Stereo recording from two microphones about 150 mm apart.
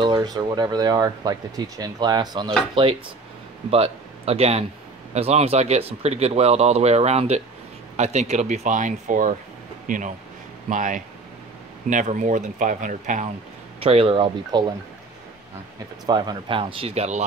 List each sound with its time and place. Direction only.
0.0 s a man's voice: 30° right (ahead or behind); by 13.3 s 55° right (ahead or behind)
13.7 s speech: 40° right (ahead or behind)
16.1 s speech: 30° right (ahead or behind); by 17.2 s 45° right (ahead or behind)